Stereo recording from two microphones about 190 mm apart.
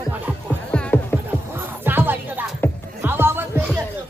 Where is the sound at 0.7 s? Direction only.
5° left (ahead or behind).